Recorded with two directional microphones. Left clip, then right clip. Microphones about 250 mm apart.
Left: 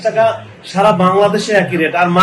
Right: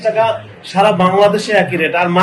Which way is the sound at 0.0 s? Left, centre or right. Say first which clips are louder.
Left 1 dB; centre.